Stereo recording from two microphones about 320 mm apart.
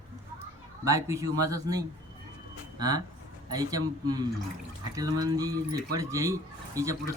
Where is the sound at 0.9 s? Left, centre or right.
Centre.